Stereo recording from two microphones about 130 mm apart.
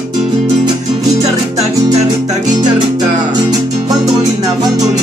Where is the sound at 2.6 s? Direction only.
35° right (ahead or behind).